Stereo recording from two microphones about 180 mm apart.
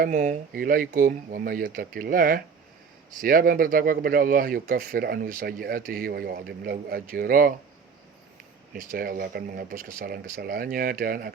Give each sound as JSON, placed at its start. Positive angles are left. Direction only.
{"t": 0.0, "sound": "speech", "side_deg": -50}
{"t": 8.7, "sound": "speech", "side_deg": -50}